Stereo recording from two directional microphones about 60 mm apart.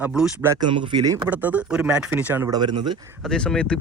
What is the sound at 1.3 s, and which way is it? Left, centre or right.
A man's voice, right.